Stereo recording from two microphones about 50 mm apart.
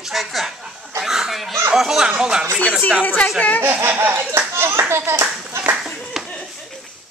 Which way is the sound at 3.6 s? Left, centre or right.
Right.